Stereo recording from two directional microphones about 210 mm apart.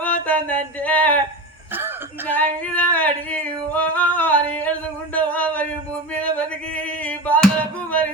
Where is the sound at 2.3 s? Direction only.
5° left (ahead or behind).